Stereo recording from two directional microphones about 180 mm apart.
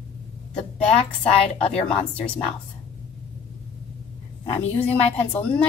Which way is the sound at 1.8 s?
5° left (ahead or behind).